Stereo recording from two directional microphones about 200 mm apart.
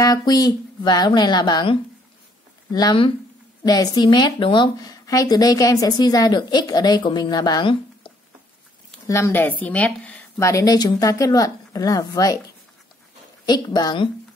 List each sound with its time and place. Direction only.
0.0 s speech: 20° left (ahead or behind)
13.5 s speech: 20° left (ahead or behind)